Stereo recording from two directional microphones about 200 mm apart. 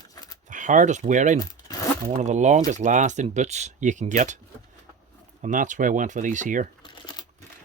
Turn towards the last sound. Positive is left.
turn(degrees=-40)  # may be behind; listen again after turning